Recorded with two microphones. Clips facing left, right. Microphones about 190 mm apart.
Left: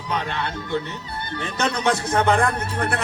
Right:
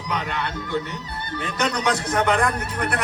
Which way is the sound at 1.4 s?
25° left (ahead or behind).